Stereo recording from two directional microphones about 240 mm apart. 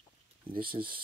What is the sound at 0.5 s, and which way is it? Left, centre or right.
Speech, right.